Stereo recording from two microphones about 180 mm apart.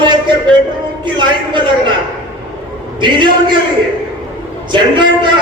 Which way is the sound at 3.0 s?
25° right (ahead or behind).